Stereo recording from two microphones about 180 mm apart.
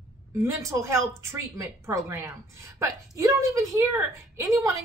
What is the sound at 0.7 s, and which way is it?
A woman's voice, 15° right (ahead or behind).